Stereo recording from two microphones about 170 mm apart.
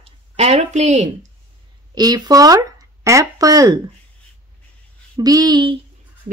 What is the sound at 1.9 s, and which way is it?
Speech, 25° right (ahead or behind).